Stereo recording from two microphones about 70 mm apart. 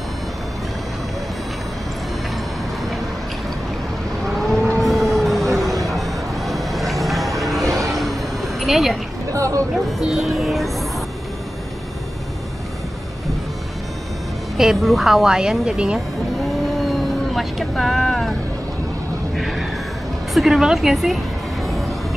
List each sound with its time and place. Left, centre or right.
4.4 s vehicle: centre
4.7 s printer: centre
5.9 s music: centre
7.9 s vehicle: centre
9.3 s a sound: right
9.8 s music: centre
14.6 s a woman's voice: centre
16.3 s vehicle: centre
19.3 s a sound: centre
20.3 s a woman's voice: centre